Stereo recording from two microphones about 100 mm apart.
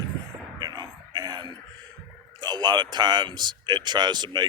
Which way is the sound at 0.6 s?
40° right (ahead or behind).